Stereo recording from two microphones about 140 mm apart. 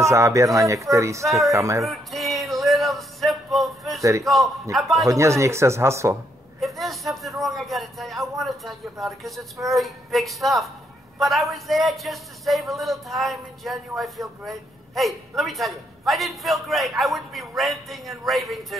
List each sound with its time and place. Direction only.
0.0 s speech: 20° right (ahead or behind)
1.2 s a woman's voice: centre (ahead or behind)
1.5 s speech: 20° right (ahead or behind)
1.9 s music: centre (ahead or behind)
4.0 s a man's voice: 20° right (ahead or behind)
4.7 s a woman's voice: centre (ahead or behind)
5.0 s speech: 20° right (ahead or behind)
6.6 s a woman's voice: centre (ahead or behind)